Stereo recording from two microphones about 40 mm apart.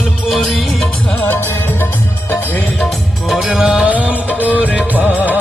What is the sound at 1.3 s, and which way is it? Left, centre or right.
Music, left.